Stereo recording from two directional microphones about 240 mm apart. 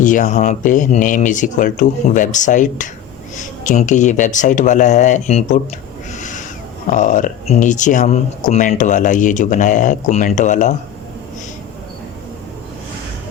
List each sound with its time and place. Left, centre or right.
0.0 s speech: left
6.1 s owl: left
6.9 s speech: left